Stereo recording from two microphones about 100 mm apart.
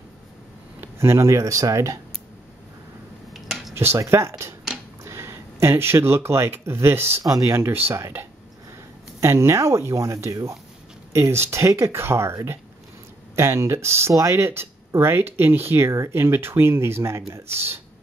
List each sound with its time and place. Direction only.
0.7 s speech: 25° right (ahead or behind)
3.3 s a sound: centre (ahead or behind)
3.7 s speech: 25° right (ahead or behind)